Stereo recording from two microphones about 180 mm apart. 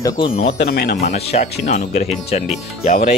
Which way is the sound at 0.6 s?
65° left (ahead or behind).